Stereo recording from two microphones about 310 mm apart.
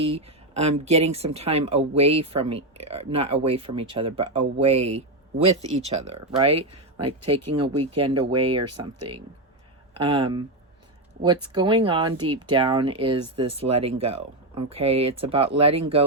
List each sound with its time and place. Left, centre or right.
0.0 s speech: centre
4.9 s speech: right
5.6 s speech: right
7.3 s speech: right
7.9 s speech: centre
11.4 s speech: centre